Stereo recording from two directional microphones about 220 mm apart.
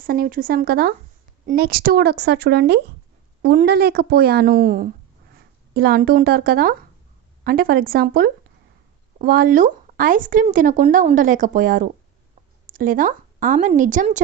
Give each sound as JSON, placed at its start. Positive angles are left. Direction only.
{"t": 0.0, "sound": "a woman's voice", "side_deg": -40}